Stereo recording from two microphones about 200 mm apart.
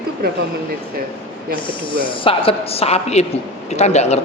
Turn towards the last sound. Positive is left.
turn(degrees=35)  # may be behind; listen again after turning